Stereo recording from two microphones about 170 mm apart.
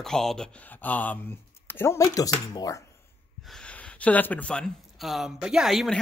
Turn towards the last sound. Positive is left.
turn(degrees=0)  # may be behind; listen again after turning